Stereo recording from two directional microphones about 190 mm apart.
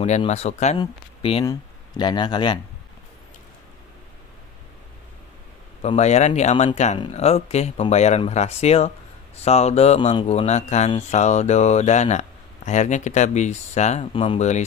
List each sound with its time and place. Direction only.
0.0 s speech: 35° left (ahead or behind)
5.8 s speech: 35° left (ahead or behind)